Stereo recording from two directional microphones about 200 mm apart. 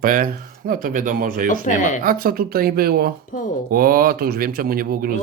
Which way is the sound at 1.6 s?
40° left (ahead or behind).